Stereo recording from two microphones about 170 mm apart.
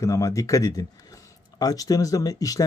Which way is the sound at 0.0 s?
20° left (ahead or behind).